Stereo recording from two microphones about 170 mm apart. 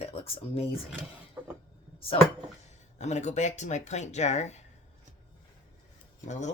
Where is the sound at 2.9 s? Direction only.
40° left (ahead or behind).